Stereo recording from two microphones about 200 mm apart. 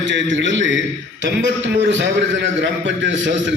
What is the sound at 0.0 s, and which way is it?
A man's voice, 65° right (ahead or behind).